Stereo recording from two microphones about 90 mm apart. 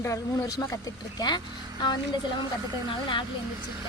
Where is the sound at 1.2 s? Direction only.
55° left (ahead or behind).